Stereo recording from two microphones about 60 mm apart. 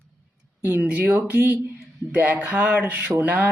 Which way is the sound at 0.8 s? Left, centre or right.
Right.